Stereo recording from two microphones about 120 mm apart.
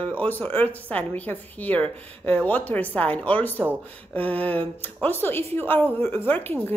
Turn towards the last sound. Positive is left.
turn(degrees=15)  # may be behind; listen again after turning